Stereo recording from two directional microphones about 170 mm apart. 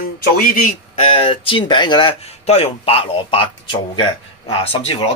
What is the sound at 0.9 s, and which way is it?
Speech, 30° left (ahead or behind).